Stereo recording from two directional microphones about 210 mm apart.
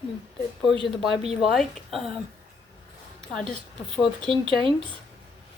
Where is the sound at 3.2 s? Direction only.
5° left (ahead or behind).